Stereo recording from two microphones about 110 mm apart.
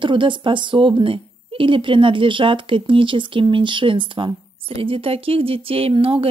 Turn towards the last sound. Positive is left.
turn(degrees=-55)  # may be behind; listen again after turning